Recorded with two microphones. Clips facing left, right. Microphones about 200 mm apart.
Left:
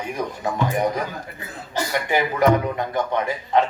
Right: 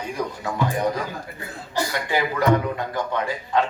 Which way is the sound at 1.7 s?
20° left (ahead or behind).